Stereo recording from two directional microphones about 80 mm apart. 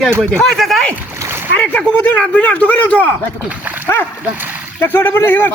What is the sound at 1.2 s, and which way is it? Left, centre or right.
Splash, right.